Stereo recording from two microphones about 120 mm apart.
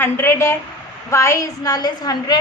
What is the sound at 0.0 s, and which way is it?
A woman's voice, 20° left (ahead or behind).